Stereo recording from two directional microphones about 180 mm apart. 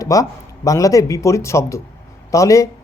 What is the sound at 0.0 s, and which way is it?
Speech, 20° left (ahead or behind).